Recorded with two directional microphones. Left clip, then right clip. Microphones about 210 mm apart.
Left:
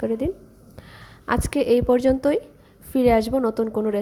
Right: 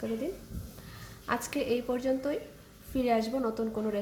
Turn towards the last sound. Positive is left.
turn(degrees=35)  # may be behind; listen again after turning